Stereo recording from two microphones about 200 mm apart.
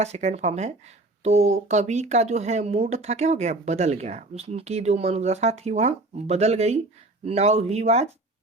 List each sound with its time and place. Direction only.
0.0 s speech: 35° right (ahead or behind)